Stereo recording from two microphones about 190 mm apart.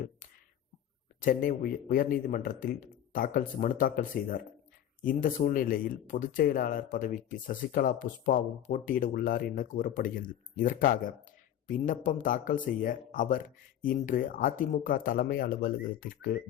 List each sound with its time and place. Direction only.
1.2 s speech: 45° left (ahead or behind)